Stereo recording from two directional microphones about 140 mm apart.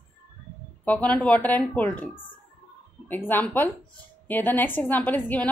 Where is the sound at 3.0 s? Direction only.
15° left (ahead or behind).